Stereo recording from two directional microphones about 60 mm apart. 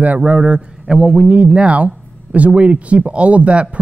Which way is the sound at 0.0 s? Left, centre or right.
Right.